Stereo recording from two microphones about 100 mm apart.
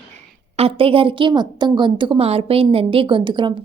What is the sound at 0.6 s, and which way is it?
A woman's voice, 65° right (ahead or behind).